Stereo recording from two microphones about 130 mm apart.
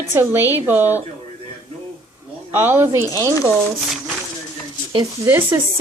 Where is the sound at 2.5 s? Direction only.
15° right (ahead or behind).